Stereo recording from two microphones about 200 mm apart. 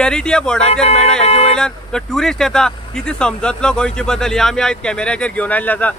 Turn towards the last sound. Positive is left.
turn(degrees=10)  # may be behind; listen again after turning